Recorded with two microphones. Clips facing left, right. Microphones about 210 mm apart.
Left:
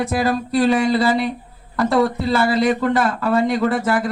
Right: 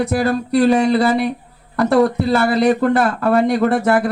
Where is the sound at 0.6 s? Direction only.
45° right (ahead or behind).